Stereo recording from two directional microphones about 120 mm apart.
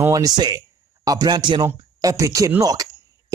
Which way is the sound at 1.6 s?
25° right (ahead or behind).